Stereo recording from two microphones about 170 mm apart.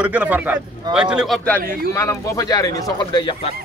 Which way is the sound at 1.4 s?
10° left (ahead or behind).